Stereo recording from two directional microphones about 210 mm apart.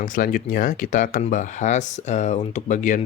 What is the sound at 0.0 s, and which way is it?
Speech, 40° left (ahead or behind).